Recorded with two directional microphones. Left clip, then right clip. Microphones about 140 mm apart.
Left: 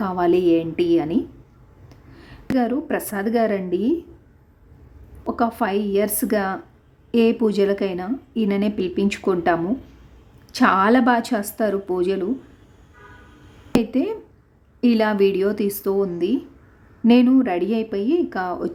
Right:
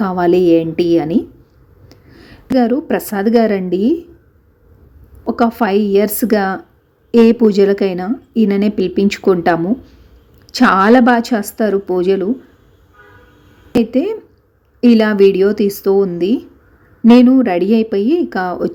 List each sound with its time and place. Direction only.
0.0 s a woman's voice: 20° right (ahead or behind)
1.9 s a sound: 15° right (ahead or behind)
2.6 s a woman's voice: 20° right (ahead or behind)
5.2 s a woman's voice: 20° right (ahead or behind)
13.9 s a woman's voice: 15° right (ahead or behind)